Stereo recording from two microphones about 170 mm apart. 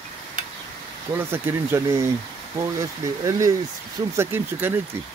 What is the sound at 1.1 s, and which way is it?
Speech, 15° right (ahead or behind).